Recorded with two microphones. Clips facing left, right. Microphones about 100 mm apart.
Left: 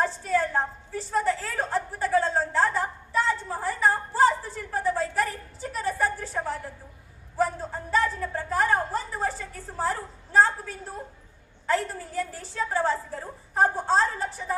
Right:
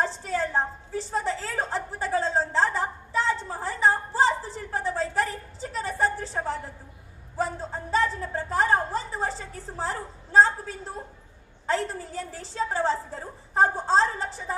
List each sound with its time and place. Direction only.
0.0 s a woman's voice: 25° right (ahead or behind)
3.1 s a sound: 25° right (ahead or behind)
9.7 s a woman's voice: 30° right (ahead or behind)